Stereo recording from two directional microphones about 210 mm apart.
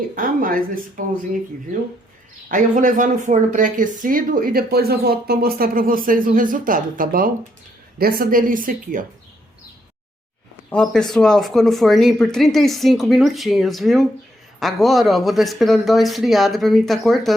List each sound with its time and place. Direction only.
0.2 s speech: 40° right (ahead or behind)
2.5 s speech: 40° right (ahead or behind)
10.7 s speech: 5° left (ahead or behind)